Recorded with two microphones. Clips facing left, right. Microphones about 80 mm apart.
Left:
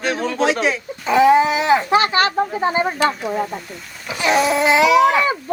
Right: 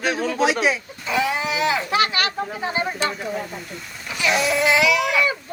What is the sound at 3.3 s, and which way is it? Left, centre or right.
Speech, left.